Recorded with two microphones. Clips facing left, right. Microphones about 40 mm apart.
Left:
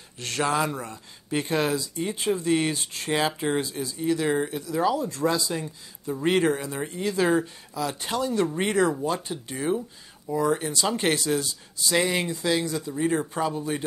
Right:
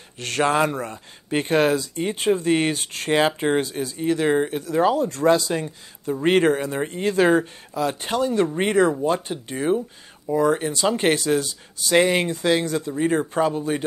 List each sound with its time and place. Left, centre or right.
0.2 s speech: right
3.2 s speech: right
11.1 s speech: right